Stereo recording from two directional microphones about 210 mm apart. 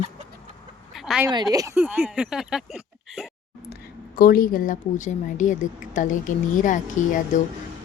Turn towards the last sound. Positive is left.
turn(degrees=35)  # may be behind; listen again after turning